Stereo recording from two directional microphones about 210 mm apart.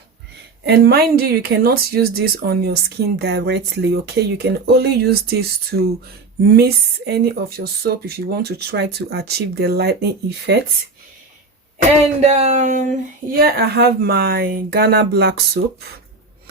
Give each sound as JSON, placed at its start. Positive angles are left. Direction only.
{"t": 0.6, "sound": "speech", "side_deg": -50}
{"t": 11.9, "sound": "speech", "side_deg": -30}